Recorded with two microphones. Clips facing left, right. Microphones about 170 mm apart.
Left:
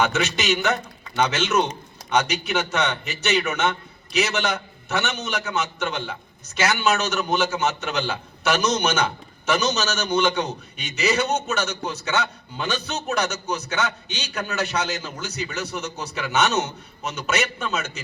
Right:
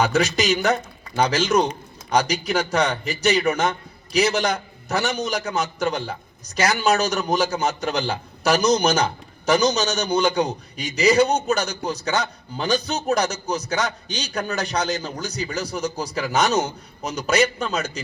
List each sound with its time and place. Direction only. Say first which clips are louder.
0.0 s a man's voice: right 3 dB; 35° right (ahead or behind)